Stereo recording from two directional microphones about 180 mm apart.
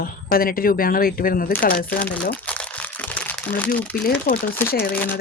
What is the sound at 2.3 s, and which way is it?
Crumpling, 5° left (ahead or behind).